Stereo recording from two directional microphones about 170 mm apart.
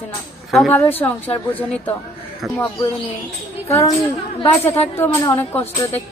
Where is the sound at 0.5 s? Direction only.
Centre (ahead or behind).